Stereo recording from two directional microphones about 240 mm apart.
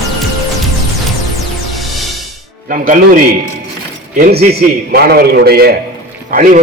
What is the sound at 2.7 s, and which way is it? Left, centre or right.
A man's voice, right.